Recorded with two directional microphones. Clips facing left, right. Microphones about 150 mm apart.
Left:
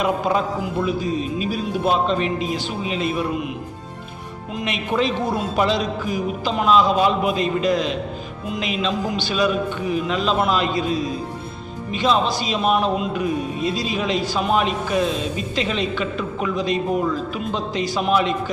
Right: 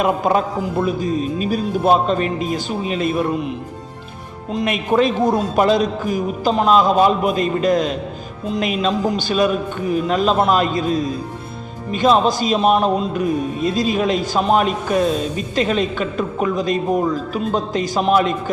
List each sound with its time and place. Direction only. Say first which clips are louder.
0.0 s a man's voice: right 3 dB; 50° right (ahead or behind)
4.6 s a man's voice: right 5 dB; 50° right (ahead or behind)